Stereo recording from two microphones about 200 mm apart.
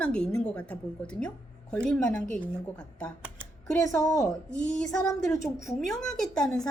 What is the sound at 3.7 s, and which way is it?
Speech, 10° left (ahead or behind).